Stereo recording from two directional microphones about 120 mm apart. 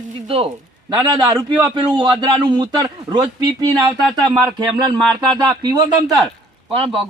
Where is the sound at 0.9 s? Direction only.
40° right (ahead or behind).